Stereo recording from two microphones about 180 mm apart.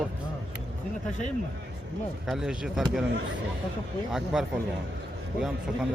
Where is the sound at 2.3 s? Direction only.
5° right (ahead or behind).